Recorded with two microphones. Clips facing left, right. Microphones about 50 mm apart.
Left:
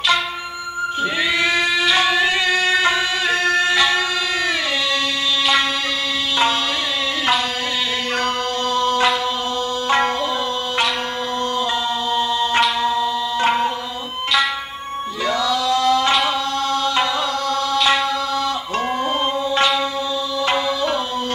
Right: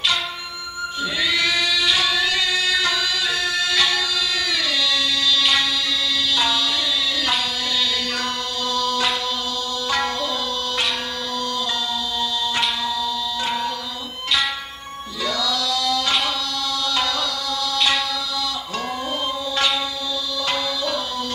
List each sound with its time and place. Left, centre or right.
1.4 s singing: left
2.0 s music: left
8.6 s music: left
12.2 s tabla: left
15.2 s chant: left
16.8 s music: left
17.7 s carnatic music: centre
20.4 s tabla: left